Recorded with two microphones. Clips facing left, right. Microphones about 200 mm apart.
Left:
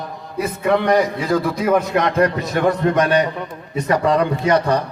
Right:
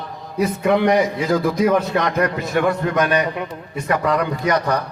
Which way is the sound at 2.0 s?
25° left (ahead or behind).